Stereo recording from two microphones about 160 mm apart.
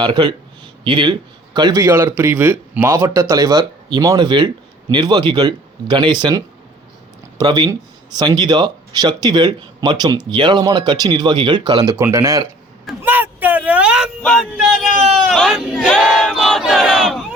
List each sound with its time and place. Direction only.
0.0 s a man's voice: 30° right (ahead or behind)
13.0 s a sound: 10° right (ahead or behind)
14.2 s speech: 5° left (ahead or behind)
15.3 s battle cry: centre (ahead or behind)